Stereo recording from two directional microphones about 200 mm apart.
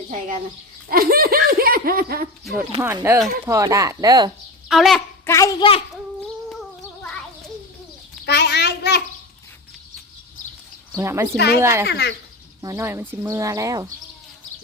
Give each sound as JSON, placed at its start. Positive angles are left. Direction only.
{"t": 0.9, "sound": "speech", "side_deg": -45}
{"t": 2.4, "sound": "speech", "side_deg": 0}
{"t": 2.8, "sound": "speech", "side_deg": -10}
{"t": 4.7, "sound": "speech", "side_deg": 0}
{"t": 5.2, "sound": "a child's voice", "side_deg": 15}
{"t": 8.2, "sound": "a child's voice", "side_deg": 55}
{"t": 10.9, "sound": "speech", "side_deg": -15}
{"t": 11.3, "sound": "a child's voice", "side_deg": 55}
{"t": 11.6, "sound": "speech", "side_deg": -10}
{"t": 11.9, "sound": "a child's voice", "side_deg": 55}
{"t": 12.6, "sound": "speech", "side_deg": -10}